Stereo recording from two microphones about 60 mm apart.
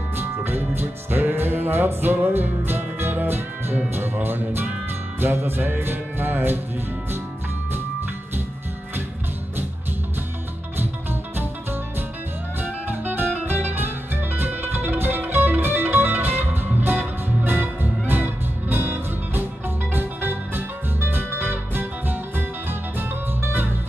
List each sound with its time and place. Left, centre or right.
0.2 s music: right
10.8 s music: right
12.5 s music: right
17.5 s music: right